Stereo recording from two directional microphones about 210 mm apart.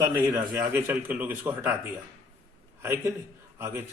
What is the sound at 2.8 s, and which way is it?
A man's voice, 10° right (ahead or behind).